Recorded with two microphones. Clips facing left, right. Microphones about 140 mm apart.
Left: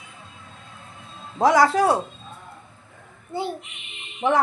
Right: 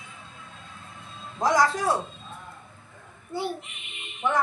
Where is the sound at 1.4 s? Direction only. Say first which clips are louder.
Left 6 dB; 70° left (ahead or behind).